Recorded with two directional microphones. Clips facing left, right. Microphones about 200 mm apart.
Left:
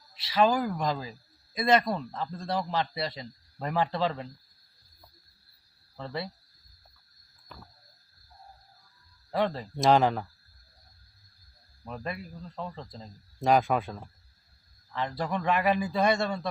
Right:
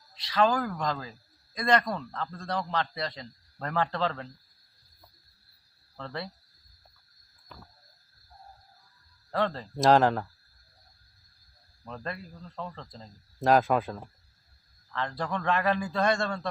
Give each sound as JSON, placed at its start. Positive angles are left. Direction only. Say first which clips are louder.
{"t": 0.3, "sound": "a man's voice", "louder": "left 1 dB", "side_deg": 10}
{"t": 6.0, "sound": "a man's voice", "louder": "left 2 dB", "side_deg": 10}
{"t": 9.3, "sound": "a man's voice", "louder": "left 1 dB", "side_deg": 15}
{"t": 9.7, "sound": "speech", "louder": "right 1 dB", "side_deg": 0}
{"t": 11.9, "sound": "a man's voice", "louder": "left 1 dB", "side_deg": 10}
{"t": 13.4, "sound": "speech", "louder": "right 1 dB", "side_deg": 0}
{"t": 14.9, "sound": "a man's voice", "louder": "left 1 dB", "side_deg": 15}